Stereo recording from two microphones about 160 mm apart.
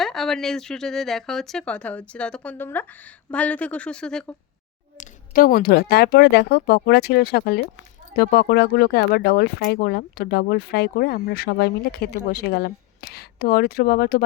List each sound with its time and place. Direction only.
0.0 s speech: centre (ahead or behind)
4.9 s speech: 60° left (ahead or behind); by 7.6 s 80° left
8.1 s speech: 70° left (ahead or behind)